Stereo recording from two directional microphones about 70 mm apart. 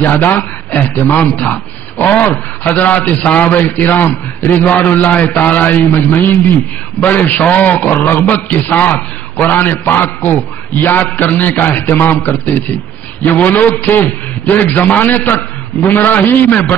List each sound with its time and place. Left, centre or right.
0.1 s a man's voice: left